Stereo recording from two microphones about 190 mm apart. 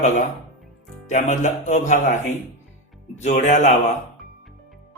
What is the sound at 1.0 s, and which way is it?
A man's voice, 40° left (ahead or behind).